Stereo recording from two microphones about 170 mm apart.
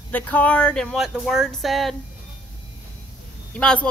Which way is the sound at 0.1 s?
10° left (ahead or behind).